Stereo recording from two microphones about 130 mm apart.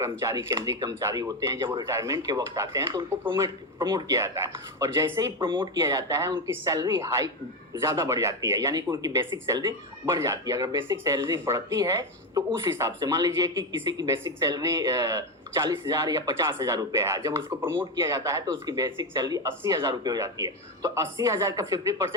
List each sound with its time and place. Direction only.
0.0 s speech: 25° right (ahead or behind)
5.4 s speech: 35° right (ahead or behind)